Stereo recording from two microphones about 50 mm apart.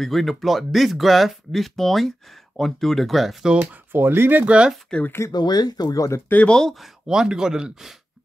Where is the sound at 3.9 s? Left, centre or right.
Right.